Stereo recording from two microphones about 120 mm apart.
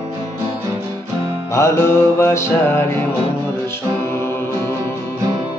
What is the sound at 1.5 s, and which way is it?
Music, 20° left (ahead or behind).